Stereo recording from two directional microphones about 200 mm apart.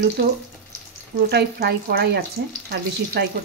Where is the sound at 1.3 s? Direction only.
50° right (ahead or behind).